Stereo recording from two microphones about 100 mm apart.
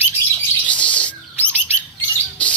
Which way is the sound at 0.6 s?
15° left (ahead or behind).